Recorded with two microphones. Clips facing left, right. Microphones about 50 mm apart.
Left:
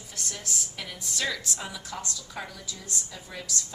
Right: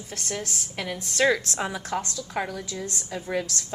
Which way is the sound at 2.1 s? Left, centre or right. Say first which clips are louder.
Right 8 dB; right.